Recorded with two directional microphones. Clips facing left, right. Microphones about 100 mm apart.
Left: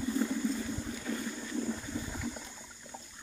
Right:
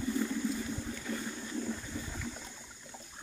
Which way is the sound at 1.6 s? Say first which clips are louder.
Left 2 dB; 10° left (ahead or behind).